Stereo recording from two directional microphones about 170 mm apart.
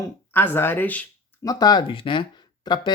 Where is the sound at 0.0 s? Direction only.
10° left (ahead or behind).